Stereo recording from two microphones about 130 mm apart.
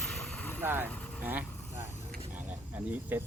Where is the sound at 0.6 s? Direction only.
15° right (ahead or behind).